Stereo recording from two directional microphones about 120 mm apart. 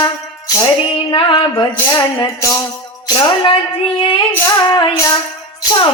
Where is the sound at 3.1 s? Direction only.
40° left (ahead or behind).